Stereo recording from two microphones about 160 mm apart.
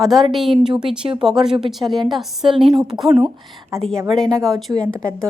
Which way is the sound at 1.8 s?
30° right (ahead or behind).